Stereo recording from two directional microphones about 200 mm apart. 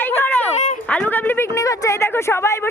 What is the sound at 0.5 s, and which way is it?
Speech, 35° left (ahead or behind).